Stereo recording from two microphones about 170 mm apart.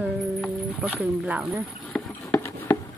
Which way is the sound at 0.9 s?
10° right (ahead or behind).